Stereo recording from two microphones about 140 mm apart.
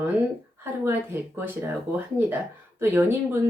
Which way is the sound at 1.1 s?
15° right (ahead or behind).